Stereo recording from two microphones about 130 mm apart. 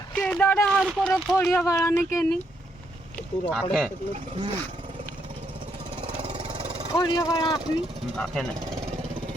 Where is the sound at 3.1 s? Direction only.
10° left (ahead or behind).